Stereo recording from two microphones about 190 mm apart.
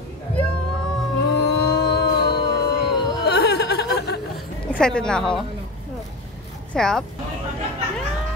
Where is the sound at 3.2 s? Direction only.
60° left (ahead or behind).